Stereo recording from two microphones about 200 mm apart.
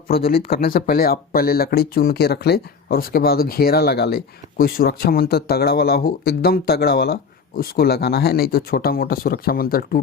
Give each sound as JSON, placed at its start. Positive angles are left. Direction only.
{"t": 0.3, "sound": "speech", "side_deg": 50}